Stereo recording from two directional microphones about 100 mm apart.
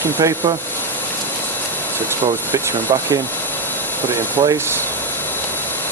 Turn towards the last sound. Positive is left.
turn(degrees=-45)  # may be behind; listen again after turning